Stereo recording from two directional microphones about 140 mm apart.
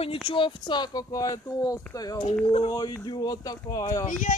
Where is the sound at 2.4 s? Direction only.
40° left (ahead or behind).